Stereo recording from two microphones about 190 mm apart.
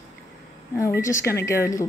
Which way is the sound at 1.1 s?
15° left (ahead or behind).